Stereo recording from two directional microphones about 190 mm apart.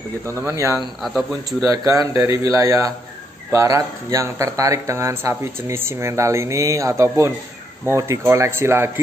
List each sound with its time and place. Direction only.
0.3 s speech: 15° right (ahead or behind)
0.7 s speech: centre (ahead or behind)
1.6 s speech: 20° right (ahead or behind)